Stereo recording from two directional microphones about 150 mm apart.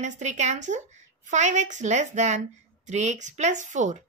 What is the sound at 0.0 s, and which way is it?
A woman's voice, 55° right (ahead or behind).